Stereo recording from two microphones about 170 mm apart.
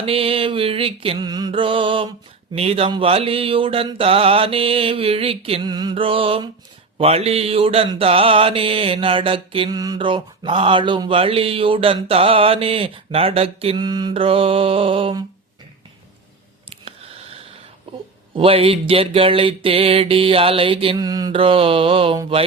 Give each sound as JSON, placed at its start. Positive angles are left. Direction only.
{"t": 0.0, "sound": "mantra", "side_deg": -35}
{"t": 16.6, "sound": "a sound", "side_deg": -35}
{"t": 18.3, "sound": "mantra", "side_deg": -35}